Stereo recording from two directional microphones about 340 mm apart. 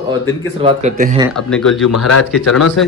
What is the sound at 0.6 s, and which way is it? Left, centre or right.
Speech, centre.